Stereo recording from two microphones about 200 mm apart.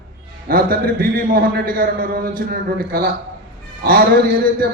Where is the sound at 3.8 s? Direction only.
45° right (ahead or behind).